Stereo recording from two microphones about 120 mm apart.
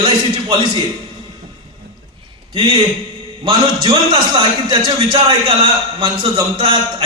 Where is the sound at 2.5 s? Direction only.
45° right (ahead or behind).